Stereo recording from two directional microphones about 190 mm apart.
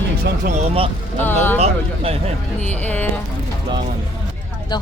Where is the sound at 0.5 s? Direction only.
30° right (ahead or behind).